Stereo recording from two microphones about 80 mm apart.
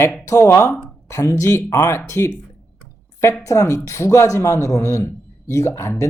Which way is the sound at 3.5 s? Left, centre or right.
Left.